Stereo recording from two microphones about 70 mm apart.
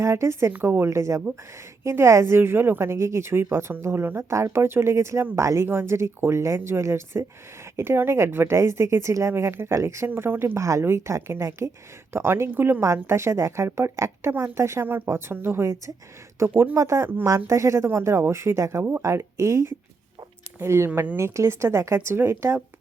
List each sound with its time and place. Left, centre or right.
0.0 s a woman's voice: right
0.5 s a woman's voice: right
0.9 s a woman's voice: right